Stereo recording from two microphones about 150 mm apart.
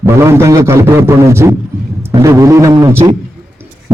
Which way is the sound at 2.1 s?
20° right (ahead or behind).